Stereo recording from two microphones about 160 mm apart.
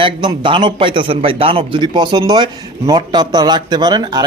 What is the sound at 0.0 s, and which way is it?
A man's voice, 30° right (ahead or behind).